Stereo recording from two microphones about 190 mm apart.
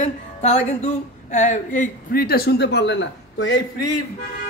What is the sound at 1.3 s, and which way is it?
Speech, 40° left (ahead or behind).